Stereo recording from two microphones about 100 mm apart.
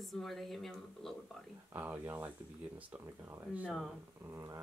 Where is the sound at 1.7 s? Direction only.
20° right (ahead or behind).